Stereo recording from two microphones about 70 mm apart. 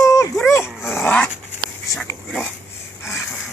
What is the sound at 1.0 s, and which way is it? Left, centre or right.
Dog, left.